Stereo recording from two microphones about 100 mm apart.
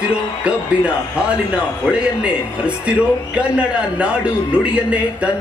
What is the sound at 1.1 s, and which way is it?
Speech, 10° right (ahead or behind).